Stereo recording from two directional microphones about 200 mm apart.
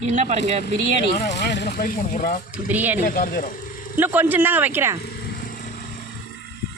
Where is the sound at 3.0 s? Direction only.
45° left (ahead or behind).